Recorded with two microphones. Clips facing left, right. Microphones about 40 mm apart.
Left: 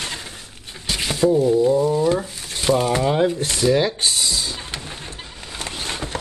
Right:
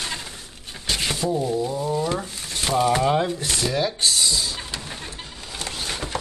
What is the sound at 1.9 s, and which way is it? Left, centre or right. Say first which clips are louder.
Speech: left 5 dB; centre.